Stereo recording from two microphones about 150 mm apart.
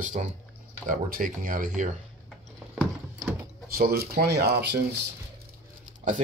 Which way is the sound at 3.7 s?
85° right.